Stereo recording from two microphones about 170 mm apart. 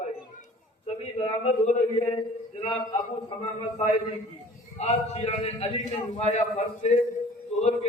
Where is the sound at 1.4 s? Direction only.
45° left (ahead or behind).